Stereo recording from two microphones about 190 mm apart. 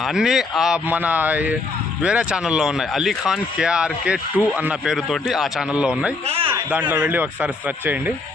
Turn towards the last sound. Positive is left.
turn(degrees=-10)  # may be behind; listen again after turning